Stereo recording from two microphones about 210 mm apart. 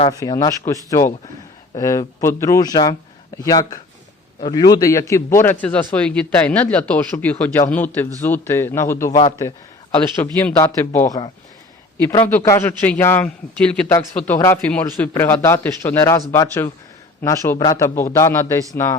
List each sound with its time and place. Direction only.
0.1 s a man's voice: 15° left (ahead or behind)
12.4 s a man's voice: 15° left (ahead or behind)